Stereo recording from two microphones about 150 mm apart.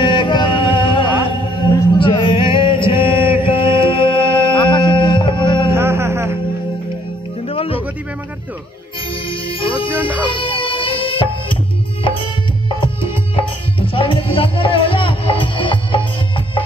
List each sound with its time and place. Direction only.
0.0 s music: 35° left (ahead or behind)
2.0 s chant: 35° left (ahead or behind)
3.4 s music: 35° left (ahead or behind)
5.7 s a sound: 15° right (ahead or behind)
7.4 s music: 40° left (ahead or behind)
9.1 s music: 35° left (ahead or behind)